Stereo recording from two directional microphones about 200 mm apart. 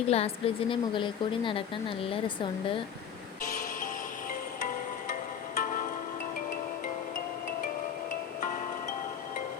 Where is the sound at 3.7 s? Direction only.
45° left (ahead or behind).